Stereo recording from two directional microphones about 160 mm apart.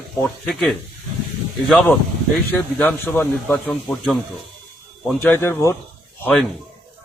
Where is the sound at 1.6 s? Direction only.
Centre (ahead or behind).